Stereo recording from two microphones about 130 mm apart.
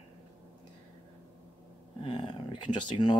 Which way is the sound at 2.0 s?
40° left (ahead or behind).